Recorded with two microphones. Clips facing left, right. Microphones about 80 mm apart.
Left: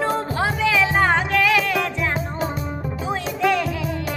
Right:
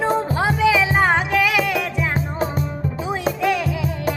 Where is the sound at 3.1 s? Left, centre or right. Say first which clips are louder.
Even; centre.